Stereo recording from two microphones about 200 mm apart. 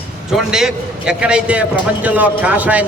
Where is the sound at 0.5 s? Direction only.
5° right (ahead or behind).